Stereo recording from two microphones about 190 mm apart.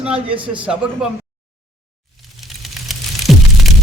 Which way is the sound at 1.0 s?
Centre (ahead or behind).